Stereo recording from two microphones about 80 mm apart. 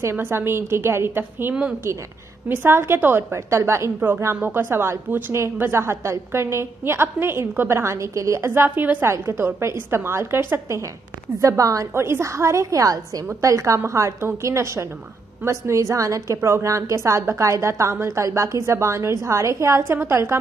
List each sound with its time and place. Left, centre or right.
0.0 s a woman's voice: right
4.4 s a woman's voice: right
9.0 s a woman's voice: right
11.4 s a woman's voice: right
11.9 s a woman's voice: right